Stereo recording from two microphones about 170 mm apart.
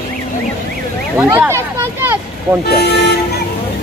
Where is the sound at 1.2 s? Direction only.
10° right (ahead or behind).